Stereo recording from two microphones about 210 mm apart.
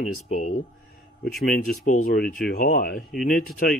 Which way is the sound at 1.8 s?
40° left (ahead or behind).